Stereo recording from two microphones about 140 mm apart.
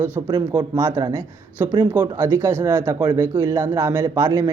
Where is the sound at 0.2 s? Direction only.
30° right (ahead or behind).